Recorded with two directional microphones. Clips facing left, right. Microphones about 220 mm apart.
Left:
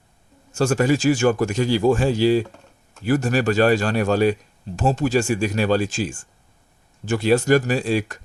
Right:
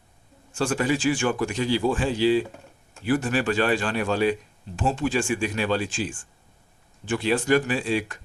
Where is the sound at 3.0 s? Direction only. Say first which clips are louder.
Left 4 dB; 45° left (ahead or behind).